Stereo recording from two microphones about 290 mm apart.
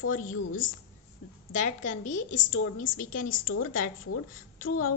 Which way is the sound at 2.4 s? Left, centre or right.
Left.